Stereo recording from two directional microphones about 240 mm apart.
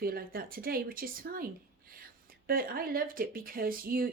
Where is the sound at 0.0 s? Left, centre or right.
Right.